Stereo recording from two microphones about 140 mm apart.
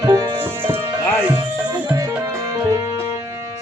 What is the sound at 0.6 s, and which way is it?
Music, 15° right (ahead or behind).